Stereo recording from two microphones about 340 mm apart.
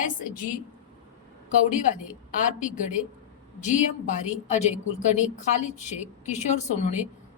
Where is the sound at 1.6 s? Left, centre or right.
Left.